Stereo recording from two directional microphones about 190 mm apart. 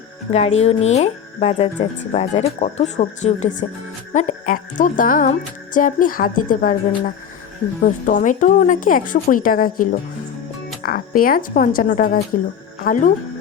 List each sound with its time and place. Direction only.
0.3 s speech: 35° left (ahead or behind)
4.1 s music: 40° left (ahead or behind)
7.8 s music: 45° left (ahead or behind)